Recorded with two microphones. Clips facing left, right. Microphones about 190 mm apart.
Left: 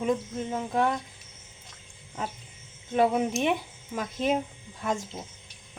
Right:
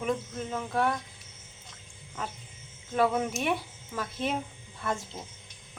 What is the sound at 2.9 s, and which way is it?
A woman's voice, 20° left (ahead or behind).